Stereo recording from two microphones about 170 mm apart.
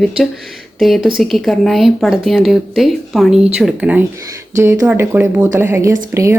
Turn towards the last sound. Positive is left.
turn(degrees=-15)  # may be behind; listen again after turning